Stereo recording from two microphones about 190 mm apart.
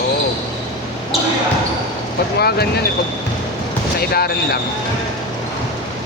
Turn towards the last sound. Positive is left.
turn(degrees=55)  # may be behind; listen again after turning